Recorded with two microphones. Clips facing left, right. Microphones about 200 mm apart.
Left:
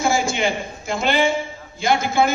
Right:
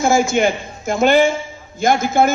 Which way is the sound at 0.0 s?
45° right (ahead or behind).